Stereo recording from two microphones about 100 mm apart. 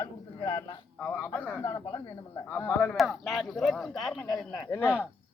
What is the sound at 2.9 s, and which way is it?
Speech, centre (ahead or behind).